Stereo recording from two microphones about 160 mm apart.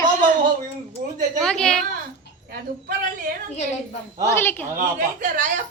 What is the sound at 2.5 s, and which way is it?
Speech, 60° right (ahead or behind).